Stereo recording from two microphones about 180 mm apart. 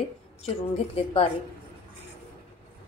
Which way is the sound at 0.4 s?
30° left (ahead or behind).